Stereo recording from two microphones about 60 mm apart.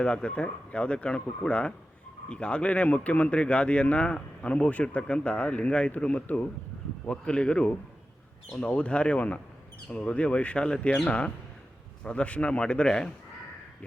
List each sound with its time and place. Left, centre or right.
0.0 s a man's voice: centre